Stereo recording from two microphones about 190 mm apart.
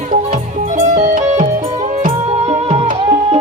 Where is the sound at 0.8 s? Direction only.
40° right (ahead or behind).